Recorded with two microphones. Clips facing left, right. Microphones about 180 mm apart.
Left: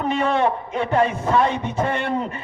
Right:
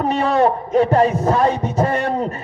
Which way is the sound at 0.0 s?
40° right (ahead or behind).